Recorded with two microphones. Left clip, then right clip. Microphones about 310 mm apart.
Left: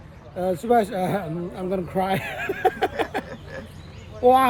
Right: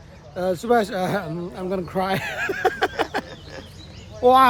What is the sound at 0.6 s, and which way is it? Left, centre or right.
Speech, centre.